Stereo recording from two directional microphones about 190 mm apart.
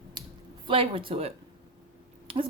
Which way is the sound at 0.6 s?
25° right (ahead or behind).